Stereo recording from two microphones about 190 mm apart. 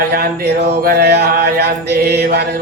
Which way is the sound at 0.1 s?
55° right (ahead or behind).